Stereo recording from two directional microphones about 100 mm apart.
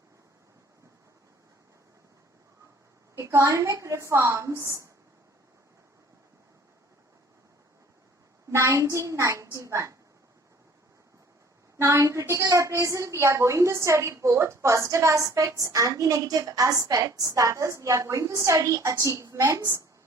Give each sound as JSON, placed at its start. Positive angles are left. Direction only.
{"t": 3.2, "sound": "a woman's voice", "side_deg": -30}
{"t": 8.4, "sound": "a woman's voice", "side_deg": -30}
{"t": 11.8, "sound": "a woman's voice", "side_deg": -30}